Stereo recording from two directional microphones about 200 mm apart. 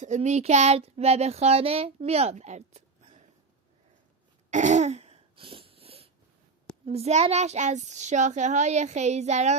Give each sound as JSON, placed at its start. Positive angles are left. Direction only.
{"t": 0.0, "sound": "speech", "side_deg": -35}
{"t": 4.5, "sound": "cough", "side_deg": -35}
{"t": 6.8, "sound": "speech", "side_deg": -30}